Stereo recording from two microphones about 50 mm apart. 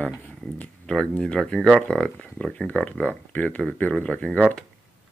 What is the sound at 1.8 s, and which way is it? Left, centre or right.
Speech, centre.